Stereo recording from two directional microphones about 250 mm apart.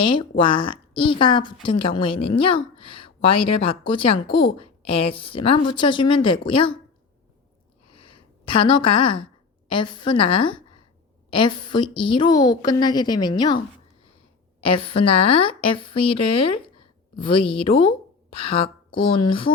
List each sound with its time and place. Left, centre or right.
0.0 s a woman's voice: centre
7.9 s a sound: left
9.6 s a woman's voice: centre
14.7 s a woman's voice: left